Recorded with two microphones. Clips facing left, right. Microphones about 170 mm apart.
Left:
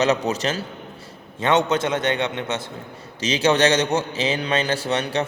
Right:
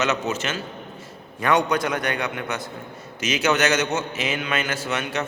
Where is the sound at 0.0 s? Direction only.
35° left (ahead or behind).